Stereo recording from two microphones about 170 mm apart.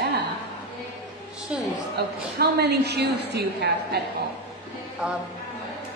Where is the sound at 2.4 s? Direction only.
75° right (ahead or behind).